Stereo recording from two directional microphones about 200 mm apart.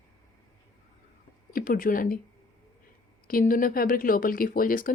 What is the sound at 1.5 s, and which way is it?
Speech, 45° left (ahead or behind).